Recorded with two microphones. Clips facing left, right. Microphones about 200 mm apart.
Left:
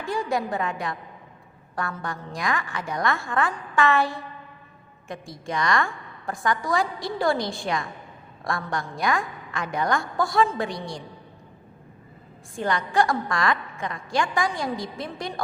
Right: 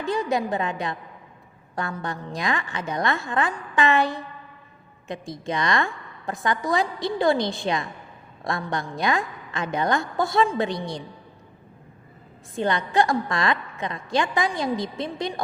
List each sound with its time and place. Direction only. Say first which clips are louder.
0.0 s a woman's voice: right 2 dB; 20° right (ahead or behind)
12.5 s a woman's voice: right 1 dB; 20° right (ahead or behind)